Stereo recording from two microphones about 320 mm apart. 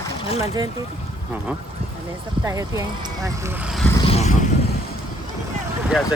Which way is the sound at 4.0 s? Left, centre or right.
Centre.